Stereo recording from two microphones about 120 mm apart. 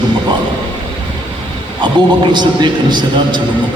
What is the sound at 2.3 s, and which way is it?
A man's voice, 40° right (ahead or behind).